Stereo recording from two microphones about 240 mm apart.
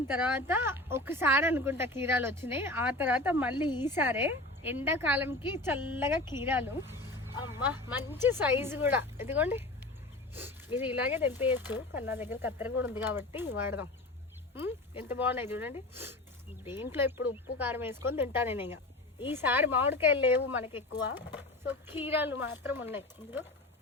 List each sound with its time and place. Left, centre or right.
0.1 s speech: centre
14.5 s speech: centre